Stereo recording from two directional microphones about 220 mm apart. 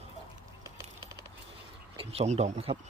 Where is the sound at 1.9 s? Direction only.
25° right (ahead or behind).